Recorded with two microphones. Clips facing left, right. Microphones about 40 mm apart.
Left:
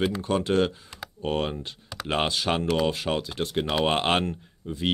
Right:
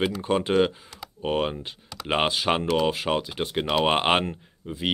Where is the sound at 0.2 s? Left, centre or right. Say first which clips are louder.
Right 4 dB; centre.